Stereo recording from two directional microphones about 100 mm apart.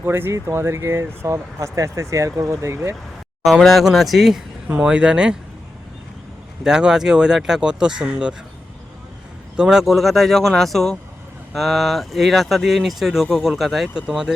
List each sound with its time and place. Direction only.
0.0 s speech: 25° right (ahead or behind)
3.4 s speech: centre (ahead or behind)
6.7 s speech: 10° right (ahead or behind)
9.6 s speech: 5° right (ahead or behind)